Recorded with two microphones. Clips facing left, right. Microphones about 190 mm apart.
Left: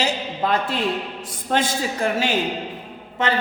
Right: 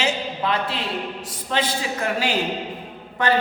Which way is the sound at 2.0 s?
25° left (ahead or behind).